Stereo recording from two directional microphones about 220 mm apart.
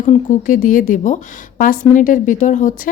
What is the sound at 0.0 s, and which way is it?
A woman's voice, 35° left (ahead or behind).